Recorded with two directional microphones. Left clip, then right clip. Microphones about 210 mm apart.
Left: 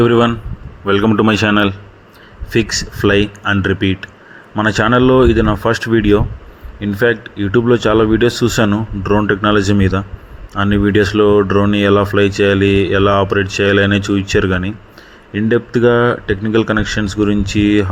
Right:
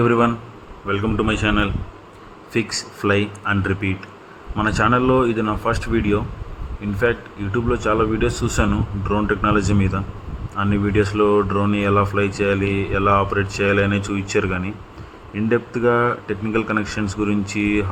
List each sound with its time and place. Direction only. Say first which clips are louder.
0.0 s speech: left 5 dB; 20° left (ahead or behind)